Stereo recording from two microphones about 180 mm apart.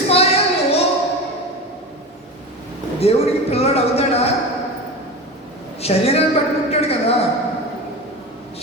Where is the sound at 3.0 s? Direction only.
35° left (ahead or behind).